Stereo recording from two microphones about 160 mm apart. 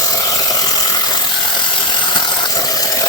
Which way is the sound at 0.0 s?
20° left (ahead or behind).